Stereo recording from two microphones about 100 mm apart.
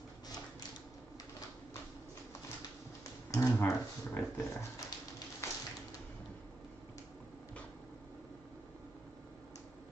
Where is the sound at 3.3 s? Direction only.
30° left (ahead or behind).